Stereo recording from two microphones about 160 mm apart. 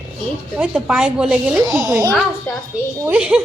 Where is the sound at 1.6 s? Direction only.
20° right (ahead or behind).